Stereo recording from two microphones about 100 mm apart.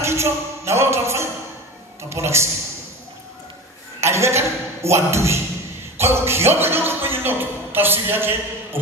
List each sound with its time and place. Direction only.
0.0 s a man's voice: 25° right (ahead or behind)
4.0 s a man's voice: 25° right (ahead or behind)